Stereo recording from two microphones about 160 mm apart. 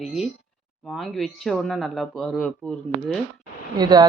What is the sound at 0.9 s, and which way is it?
Speech, centre (ahead or behind).